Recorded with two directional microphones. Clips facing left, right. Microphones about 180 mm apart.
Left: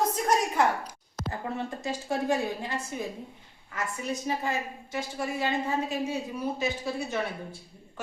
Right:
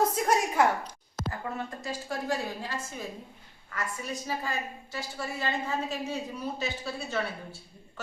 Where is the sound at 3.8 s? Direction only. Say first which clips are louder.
Left 3 dB; 20° left (ahead or behind).